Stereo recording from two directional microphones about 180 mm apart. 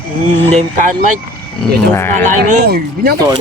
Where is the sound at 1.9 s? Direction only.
10° left (ahead or behind).